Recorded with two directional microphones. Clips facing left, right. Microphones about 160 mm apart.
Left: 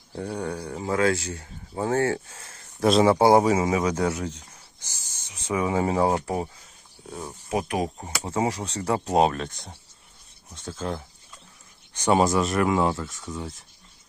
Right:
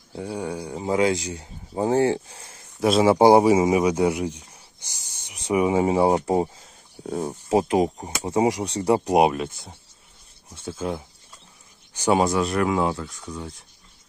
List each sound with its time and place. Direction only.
0.1 s speech: 10° right (ahead or behind)
2.8 s speech: 5° right (ahead or behind); by 6.7 s 25° right (ahead or behind)
7.0 s speech: 45° right (ahead or behind)
7.5 s speech: 25° right (ahead or behind); by 13.7 s centre (ahead or behind)